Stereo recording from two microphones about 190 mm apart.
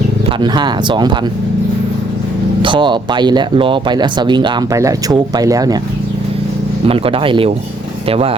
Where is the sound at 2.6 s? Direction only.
25° right (ahead or behind).